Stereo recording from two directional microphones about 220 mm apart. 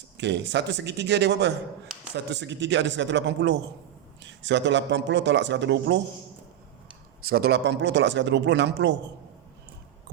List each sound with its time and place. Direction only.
0.2 s a man's voice: 50° right (ahead or behind)
7.2 s a man's voice: 45° right (ahead or behind)